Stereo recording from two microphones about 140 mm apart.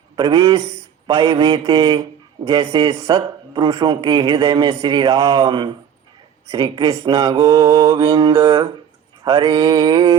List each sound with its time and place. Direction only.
0.2 s mantra: 25° right (ahead or behind)
1.4 s a man's voice: 35° right (ahead or behind)
6.5 s mantra: 25° right (ahead or behind)
9.2 s a man's voice: 35° right (ahead or behind)